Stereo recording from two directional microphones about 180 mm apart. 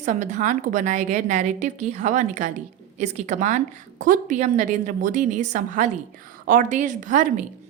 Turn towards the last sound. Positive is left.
turn(degrees=-45)  # may be behind; listen again after turning